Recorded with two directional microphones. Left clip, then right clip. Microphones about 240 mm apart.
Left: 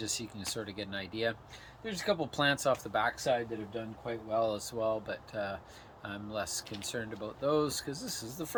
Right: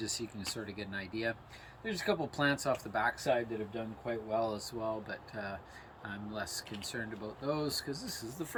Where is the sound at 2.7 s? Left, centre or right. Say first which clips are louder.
Left 2 dB; centre.